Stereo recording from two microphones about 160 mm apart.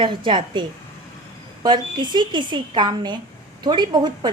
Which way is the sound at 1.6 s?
30° right (ahead or behind).